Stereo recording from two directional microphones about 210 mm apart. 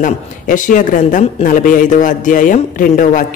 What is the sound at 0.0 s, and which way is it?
Speech, 40° left (ahead or behind).